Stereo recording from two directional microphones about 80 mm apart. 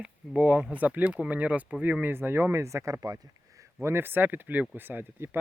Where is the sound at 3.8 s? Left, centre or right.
Right.